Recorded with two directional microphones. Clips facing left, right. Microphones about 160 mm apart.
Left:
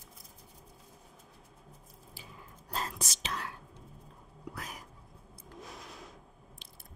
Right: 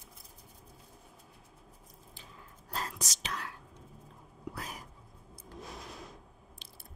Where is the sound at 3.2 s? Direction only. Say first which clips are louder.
Left 1 dB; 25° left (ahead or behind).